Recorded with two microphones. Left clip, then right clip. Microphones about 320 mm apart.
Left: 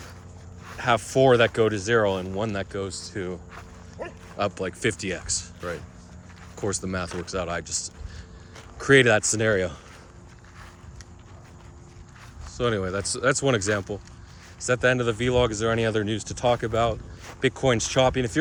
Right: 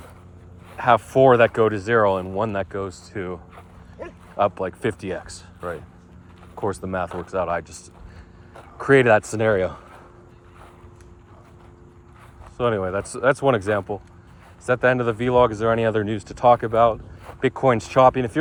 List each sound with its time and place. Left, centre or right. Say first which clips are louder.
0.8 s speech: right 5 dB; centre
4.0 s bow-wow: even; left
4.4 s speech: right 6 dB; centre
5.3 s speech: left 10 dB; centre
6.8 s speech: right 4 dB; centre
7.7 s speech: left 11 dB; centre
9.4 s speech: right 3 dB; centre
12.5 s speech: right 4 dB; centre